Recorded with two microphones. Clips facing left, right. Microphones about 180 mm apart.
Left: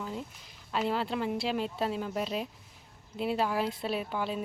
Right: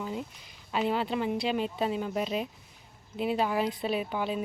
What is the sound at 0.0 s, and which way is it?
Speech, 5° right (ahead or behind).